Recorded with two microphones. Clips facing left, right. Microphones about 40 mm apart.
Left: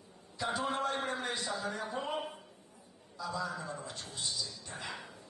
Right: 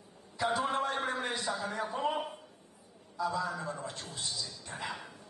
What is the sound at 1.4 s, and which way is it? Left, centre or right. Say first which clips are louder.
Speech: right 2 dB; right.